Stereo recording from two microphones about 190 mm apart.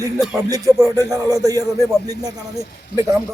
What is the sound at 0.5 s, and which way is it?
A man's voice, 15° right (ahead or behind).